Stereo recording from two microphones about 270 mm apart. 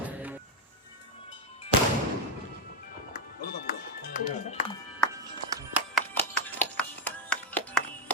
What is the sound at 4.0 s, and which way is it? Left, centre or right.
Music, left.